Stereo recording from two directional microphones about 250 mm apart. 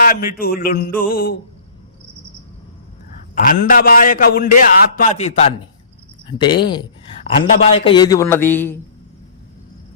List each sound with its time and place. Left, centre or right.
0.0 s a man's voice: left
3.3 s a man's voice: left; by 8.8 s centre